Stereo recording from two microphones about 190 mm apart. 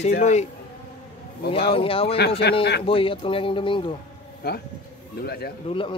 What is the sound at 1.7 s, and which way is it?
Speech, 30° left (ahead or behind).